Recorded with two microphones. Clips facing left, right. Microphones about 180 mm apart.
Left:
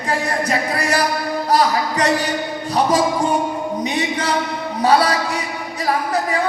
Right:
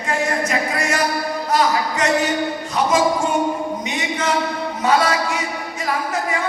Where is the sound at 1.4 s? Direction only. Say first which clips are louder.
Left 2 dB; 35° left (ahead or behind).